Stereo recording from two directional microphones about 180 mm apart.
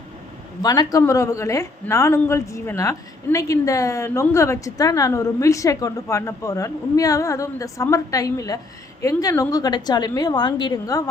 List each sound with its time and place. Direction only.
0.6 s a woman's voice: 20° left (ahead or behind)